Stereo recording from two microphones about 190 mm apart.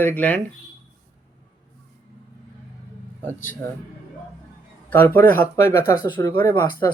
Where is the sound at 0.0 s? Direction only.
10° left (ahead or behind).